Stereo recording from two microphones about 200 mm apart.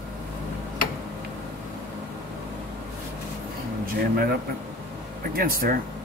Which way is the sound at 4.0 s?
50° right (ahead or behind).